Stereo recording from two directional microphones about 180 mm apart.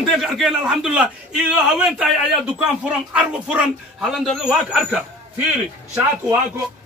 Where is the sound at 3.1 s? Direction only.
5° right (ahead or behind).